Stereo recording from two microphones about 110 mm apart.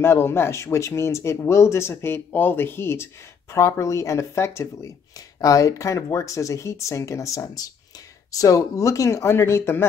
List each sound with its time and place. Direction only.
0.0 s speech: 25° left (ahead or behind)